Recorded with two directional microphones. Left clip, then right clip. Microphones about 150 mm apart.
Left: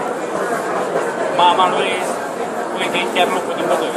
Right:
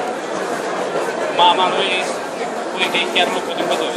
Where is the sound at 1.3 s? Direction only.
25° right (ahead or behind).